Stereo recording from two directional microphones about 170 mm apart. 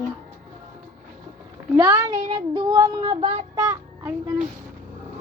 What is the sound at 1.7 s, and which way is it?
Child singing, 20° right (ahead or behind).